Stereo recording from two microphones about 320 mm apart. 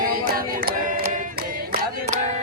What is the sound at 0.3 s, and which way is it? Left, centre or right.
Choir, right.